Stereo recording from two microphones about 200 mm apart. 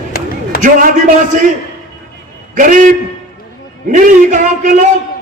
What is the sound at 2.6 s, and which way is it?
A man's voice, 40° right (ahead or behind).